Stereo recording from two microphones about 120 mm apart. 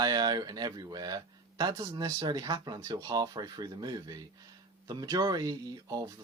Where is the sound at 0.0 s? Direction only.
35° right (ahead or behind).